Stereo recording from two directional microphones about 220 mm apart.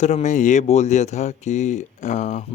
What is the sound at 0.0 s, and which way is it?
Speech, 30° left (ahead or behind).